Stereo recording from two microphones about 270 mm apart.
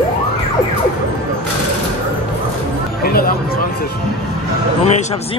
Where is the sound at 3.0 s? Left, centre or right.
Left.